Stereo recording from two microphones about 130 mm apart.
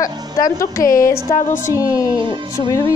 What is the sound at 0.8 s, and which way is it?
Speech, 90° left.